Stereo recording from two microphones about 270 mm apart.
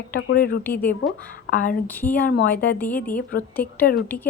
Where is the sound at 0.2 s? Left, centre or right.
Left.